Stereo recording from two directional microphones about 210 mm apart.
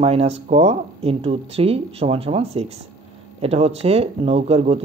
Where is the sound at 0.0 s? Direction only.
30° right (ahead or behind).